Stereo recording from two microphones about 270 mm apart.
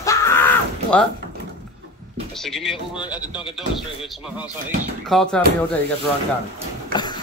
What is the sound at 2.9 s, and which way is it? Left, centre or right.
Speech, centre.